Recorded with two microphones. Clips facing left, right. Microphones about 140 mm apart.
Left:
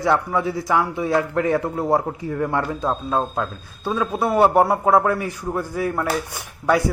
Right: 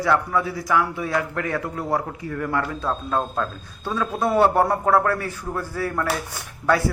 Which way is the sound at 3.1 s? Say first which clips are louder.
Left 2 dB; 10° left (ahead or behind).